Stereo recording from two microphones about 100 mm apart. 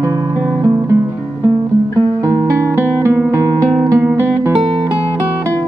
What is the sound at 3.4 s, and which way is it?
Music, 35° right (ahead or behind).